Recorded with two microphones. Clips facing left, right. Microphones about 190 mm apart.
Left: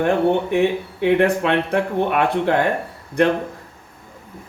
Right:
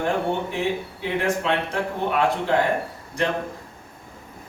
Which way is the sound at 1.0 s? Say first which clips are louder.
Left 7 dB; 60° left (ahead or behind).